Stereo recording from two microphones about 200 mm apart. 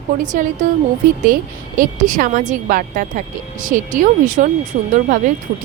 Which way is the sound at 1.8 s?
40° right (ahead or behind).